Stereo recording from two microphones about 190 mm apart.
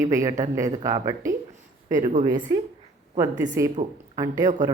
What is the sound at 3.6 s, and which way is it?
Speech, 15° right (ahead or behind).